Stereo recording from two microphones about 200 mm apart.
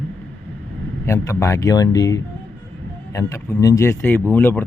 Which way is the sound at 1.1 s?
15° left (ahead or behind).